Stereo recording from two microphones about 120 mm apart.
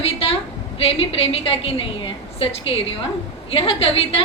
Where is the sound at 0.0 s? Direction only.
55° left (ahead or behind).